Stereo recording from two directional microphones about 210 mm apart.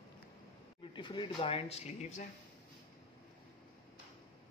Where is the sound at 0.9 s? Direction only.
20° left (ahead or behind).